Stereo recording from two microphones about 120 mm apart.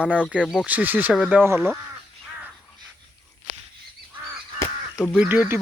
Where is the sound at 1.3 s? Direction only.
20° right (ahead or behind).